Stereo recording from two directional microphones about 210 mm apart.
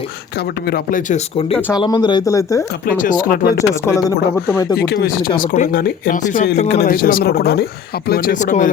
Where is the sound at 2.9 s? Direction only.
40° left (ahead or behind).